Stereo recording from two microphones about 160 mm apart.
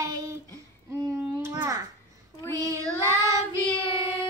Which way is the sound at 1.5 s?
25° right (ahead or behind).